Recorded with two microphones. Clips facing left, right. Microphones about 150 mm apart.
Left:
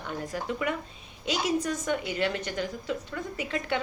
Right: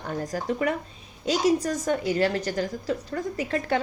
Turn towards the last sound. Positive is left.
turn(degrees=-40)  # may be behind; listen again after turning